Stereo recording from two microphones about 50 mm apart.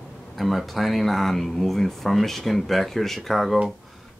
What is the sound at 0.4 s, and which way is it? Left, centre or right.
Speech, centre.